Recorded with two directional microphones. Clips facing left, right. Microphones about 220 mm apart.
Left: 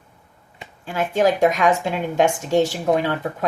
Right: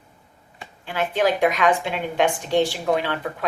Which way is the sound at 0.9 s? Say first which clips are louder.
Left 3 dB; 45° left (ahead or behind).